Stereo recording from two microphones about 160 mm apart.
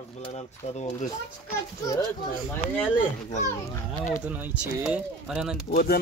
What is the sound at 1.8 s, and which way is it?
Speech, 25° left (ahead or behind).